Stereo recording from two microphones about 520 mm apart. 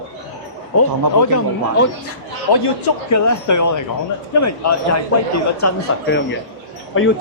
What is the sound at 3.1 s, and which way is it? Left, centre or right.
Speech, left.